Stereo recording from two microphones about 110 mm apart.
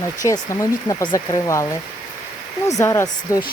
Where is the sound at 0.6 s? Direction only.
30° left (ahead or behind).